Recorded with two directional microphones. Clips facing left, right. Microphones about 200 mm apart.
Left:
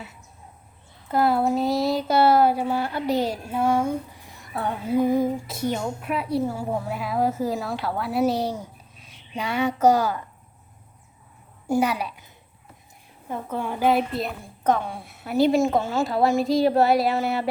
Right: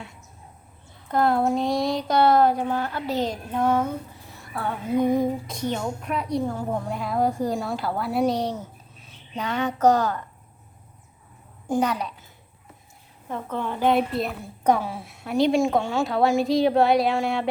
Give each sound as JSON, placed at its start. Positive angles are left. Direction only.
{"t": 1.0, "sound": "a child's voice", "side_deg": 5}
{"t": 4.9, "sound": "speech", "side_deg": 0}
{"t": 11.7, "sound": "speech", "side_deg": 10}
{"t": 13.2, "sound": "speech", "side_deg": 10}